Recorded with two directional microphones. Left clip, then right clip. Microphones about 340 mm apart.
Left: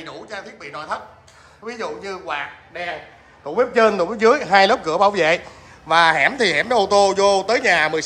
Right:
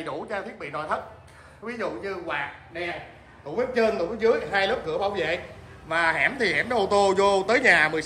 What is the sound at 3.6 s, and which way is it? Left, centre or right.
A man's voice, centre.